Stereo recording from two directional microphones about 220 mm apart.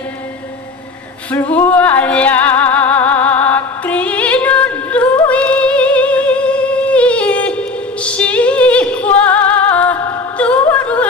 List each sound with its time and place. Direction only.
1.3 s music: 10° left (ahead or behind)